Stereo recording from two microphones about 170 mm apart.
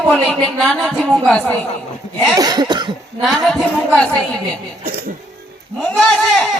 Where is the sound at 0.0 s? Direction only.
Centre (ahead or behind).